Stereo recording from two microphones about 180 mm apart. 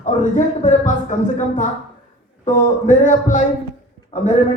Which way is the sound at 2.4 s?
45° left (ahead or behind).